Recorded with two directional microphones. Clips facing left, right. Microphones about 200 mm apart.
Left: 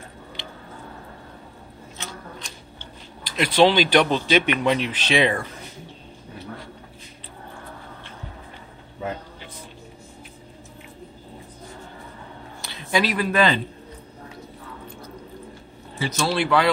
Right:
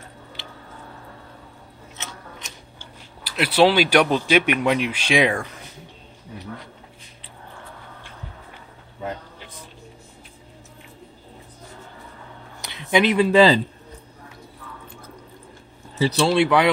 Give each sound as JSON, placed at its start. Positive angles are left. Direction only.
{"t": 0.4, "sound": "a sound", "side_deg": -5}
{"t": 2.8, "sound": "speech", "side_deg": -10}
{"t": 12.6, "sound": "speech", "side_deg": -20}
{"t": 16.0, "sound": "speech", "side_deg": -35}
{"t": 16.3, "sound": "speech", "side_deg": -20}